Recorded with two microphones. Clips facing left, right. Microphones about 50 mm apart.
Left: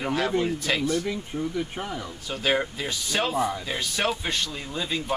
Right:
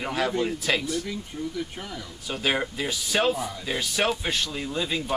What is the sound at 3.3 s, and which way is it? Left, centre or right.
Speech, left.